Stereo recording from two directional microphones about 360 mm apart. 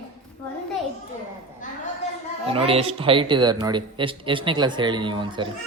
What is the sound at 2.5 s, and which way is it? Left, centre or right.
A man's voice, centre.